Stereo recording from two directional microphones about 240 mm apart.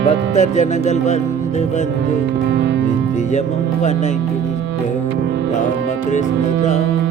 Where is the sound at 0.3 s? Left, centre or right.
Left.